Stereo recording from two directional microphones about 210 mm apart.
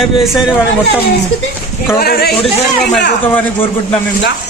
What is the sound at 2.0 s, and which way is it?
Speech, 45° left (ahead or behind).